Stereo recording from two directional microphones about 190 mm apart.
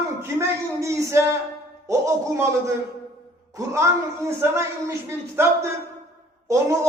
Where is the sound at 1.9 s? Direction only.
15° right (ahead or behind).